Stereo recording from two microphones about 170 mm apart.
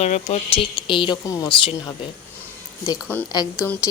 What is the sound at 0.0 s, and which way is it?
Speech, 40° left (ahead or behind).